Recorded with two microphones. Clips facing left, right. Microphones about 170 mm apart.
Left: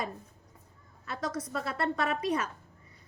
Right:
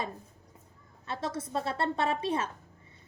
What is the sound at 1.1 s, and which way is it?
A woman's voice, 25° right (ahead or behind).